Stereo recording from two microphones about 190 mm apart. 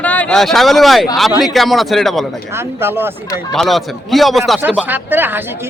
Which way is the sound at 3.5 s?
Centre (ahead or behind).